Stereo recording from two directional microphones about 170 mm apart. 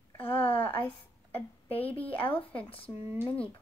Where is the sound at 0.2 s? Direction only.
35° left (ahead or behind).